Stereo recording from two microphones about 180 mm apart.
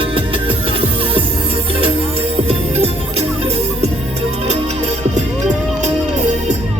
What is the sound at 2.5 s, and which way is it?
Music, 35° right (ahead or behind).